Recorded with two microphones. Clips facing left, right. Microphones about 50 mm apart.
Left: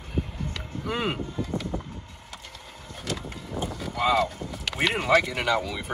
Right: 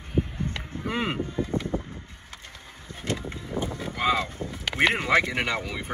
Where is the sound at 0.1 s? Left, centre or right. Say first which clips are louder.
Right 4 dB; right.